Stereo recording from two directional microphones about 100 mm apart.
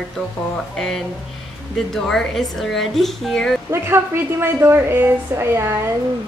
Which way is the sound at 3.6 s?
25° right (ahead or behind).